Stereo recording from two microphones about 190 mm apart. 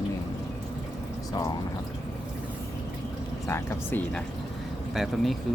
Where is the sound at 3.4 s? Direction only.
10° left (ahead or behind).